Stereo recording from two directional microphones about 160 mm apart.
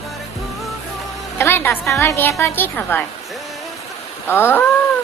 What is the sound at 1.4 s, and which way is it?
A woman's voice, 15° left (ahead or behind).